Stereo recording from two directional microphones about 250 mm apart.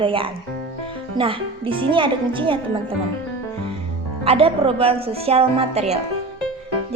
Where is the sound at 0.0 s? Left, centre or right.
Right.